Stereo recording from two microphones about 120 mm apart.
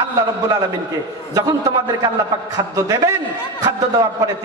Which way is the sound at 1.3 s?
30° right (ahead or behind).